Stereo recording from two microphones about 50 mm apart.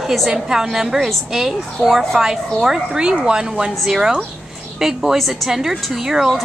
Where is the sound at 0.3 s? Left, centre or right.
Centre.